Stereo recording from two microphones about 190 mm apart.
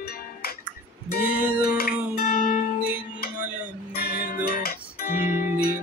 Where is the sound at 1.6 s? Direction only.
55° left (ahead or behind).